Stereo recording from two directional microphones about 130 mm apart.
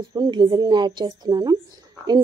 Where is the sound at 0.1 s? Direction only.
35° right (ahead or behind).